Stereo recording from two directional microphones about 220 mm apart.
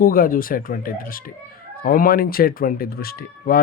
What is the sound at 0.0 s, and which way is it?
Speech, 40° left (ahead or behind).